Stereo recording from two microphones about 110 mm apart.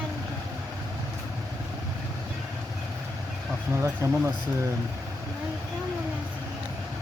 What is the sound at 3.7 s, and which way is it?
Speech, 25° right (ahead or behind).